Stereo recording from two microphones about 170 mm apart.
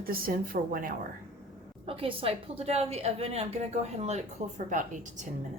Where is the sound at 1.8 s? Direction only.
35° right (ahead or behind); by 5.2 s 50° right (ahead or behind).